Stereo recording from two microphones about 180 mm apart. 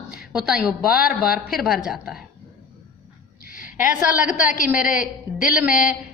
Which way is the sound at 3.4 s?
50° left (ahead or behind).